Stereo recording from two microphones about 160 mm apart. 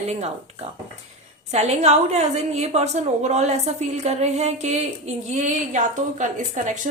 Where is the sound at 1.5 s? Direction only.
45° right (ahead or behind).